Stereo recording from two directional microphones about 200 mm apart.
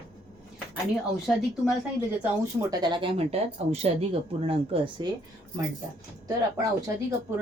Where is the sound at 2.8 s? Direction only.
25° right (ahead or behind).